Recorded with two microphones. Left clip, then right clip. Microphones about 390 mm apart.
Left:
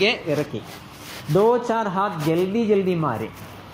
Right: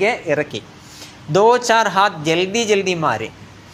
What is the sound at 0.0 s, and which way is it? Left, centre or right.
Speech, right.